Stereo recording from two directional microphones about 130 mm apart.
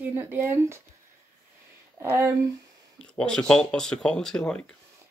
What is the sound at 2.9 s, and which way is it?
Speech, 5° left (ahead or behind).